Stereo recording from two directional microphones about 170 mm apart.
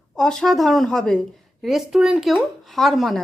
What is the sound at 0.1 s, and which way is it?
A woman's voice, 5° left (ahead or behind).